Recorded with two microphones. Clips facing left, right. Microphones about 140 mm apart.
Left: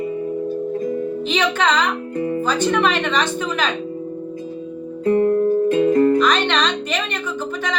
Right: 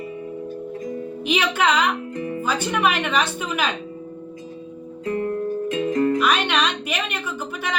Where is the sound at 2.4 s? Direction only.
10° right (ahead or behind).